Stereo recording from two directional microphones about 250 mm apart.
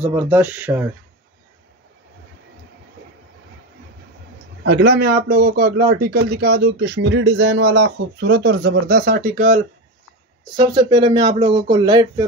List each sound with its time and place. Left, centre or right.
0.0 s speech: centre
4.6 s speech: right
10.5 s speech: centre